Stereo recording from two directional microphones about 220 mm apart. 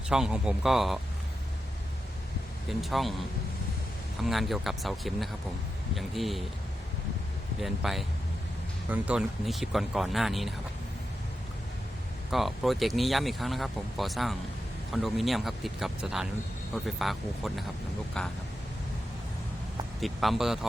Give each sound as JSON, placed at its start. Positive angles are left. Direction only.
{"t": 0.1, "sound": "speech", "side_deg": -5}
{"t": 2.6, "sound": "speech", "side_deg": 0}
{"t": 7.6, "sound": "speech", "side_deg": 0}
{"t": 12.3, "sound": "speech", "side_deg": 0}
{"t": 20.0, "sound": "speech", "side_deg": 0}